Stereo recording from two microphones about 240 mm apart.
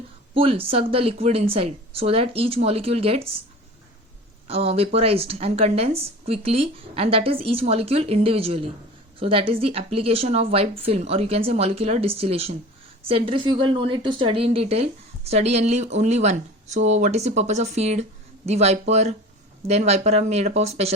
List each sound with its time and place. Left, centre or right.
0.3 s a woman's voice: right
4.4 s a woman's voice: right